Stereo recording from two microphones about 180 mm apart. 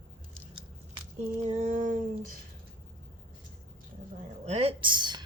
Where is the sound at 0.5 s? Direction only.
35° right (ahead or behind).